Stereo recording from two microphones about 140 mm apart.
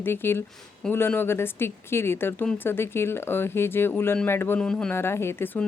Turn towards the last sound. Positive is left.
turn(degrees=15)  # may be behind; listen again after turning